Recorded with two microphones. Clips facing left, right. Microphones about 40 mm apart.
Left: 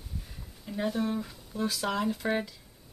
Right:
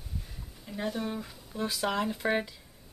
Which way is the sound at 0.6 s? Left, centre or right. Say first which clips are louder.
Left 3 dB; centre.